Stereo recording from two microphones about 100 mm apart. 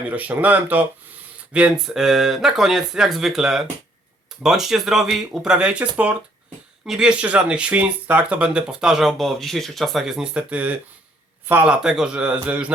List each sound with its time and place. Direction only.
0.1 s speech: 15° right (ahead or behind)
6.8 s speech: 5° right (ahead or behind)